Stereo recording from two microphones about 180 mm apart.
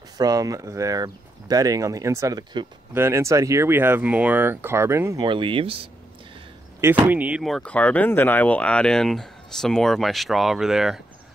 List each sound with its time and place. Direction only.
0.2 s speech: 20° right (ahead or behind)
5.2 s speech: 30° right (ahead or behind)
6.8 s speech: 10° right (ahead or behind)